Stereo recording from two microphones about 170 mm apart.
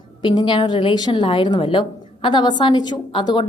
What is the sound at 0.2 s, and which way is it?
A woman's voice, 25° left (ahead or behind).